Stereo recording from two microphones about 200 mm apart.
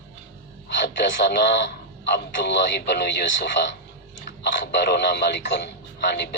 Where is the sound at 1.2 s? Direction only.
60° left (ahead or behind).